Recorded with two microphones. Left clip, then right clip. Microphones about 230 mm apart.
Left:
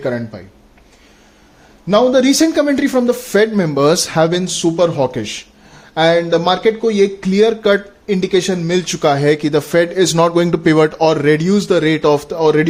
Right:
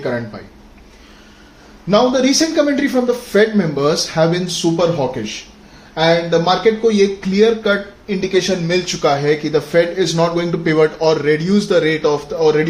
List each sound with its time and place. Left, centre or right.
1.9 s speech: left